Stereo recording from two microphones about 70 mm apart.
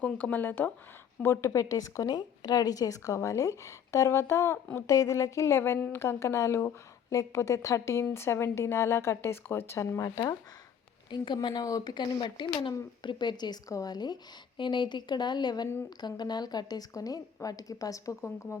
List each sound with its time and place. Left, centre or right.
0.0 s speech: left
1.2 s a woman's voice: left
2.1 s a woman's voice: left
4.9 s a woman's voice: left
8.1 s speech: left
10.0 s a woman's voice: left
11.1 s speech: left
13.7 s a woman's voice: left
13.9 s a woman's voice: left